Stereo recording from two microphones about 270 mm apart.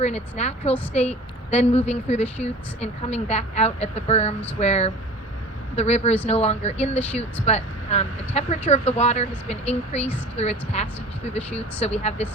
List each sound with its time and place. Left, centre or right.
0.0 s a woman's voice: left